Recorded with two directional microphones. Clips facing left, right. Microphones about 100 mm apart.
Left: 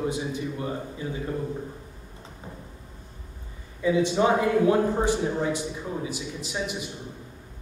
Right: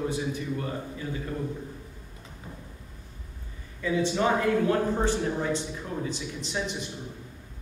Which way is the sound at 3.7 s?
15° left (ahead or behind).